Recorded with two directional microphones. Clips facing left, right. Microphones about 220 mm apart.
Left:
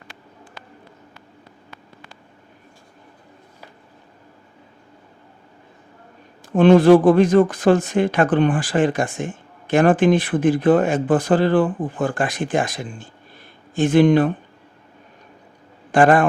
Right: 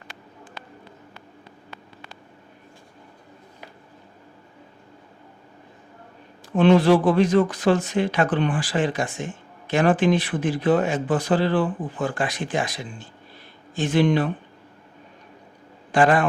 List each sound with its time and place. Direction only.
6.6 s speech: 50° left (ahead or behind)
15.9 s speech: 50° left (ahead or behind)